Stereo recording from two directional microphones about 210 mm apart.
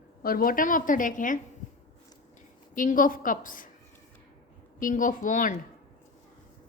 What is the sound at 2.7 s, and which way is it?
Speech, 40° left (ahead or behind).